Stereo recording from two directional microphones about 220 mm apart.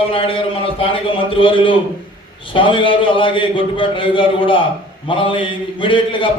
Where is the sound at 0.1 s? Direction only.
25° left (ahead or behind).